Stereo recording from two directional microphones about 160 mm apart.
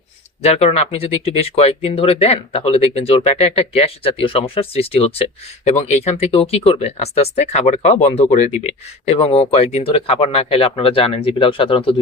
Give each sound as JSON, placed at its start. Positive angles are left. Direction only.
{"t": 0.4, "sound": "speech", "side_deg": 40}